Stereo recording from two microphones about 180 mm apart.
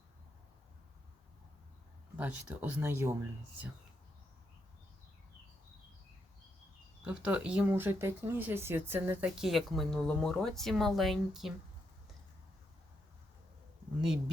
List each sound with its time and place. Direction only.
2.1 s speech: 10° right (ahead or behind)
7.0 s speech: 5° right (ahead or behind)